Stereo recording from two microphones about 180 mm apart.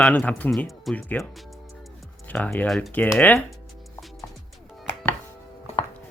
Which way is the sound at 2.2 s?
10° left (ahead or behind).